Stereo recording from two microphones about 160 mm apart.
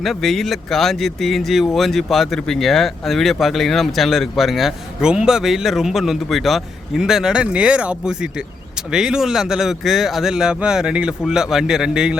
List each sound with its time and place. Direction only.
0.0 s speech: centre (ahead or behind)